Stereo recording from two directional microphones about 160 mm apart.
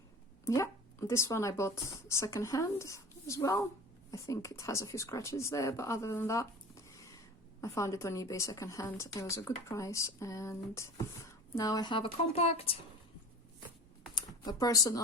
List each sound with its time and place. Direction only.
0.4 s a woman's voice: 20° left (ahead or behind); by 12.7 s 35° left (ahead or behind)
14.2 s speech: 25° left (ahead or behind)